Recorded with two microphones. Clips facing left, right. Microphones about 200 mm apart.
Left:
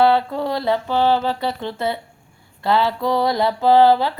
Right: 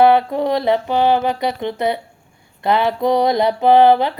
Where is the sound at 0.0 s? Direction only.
15° right (ahead or behind).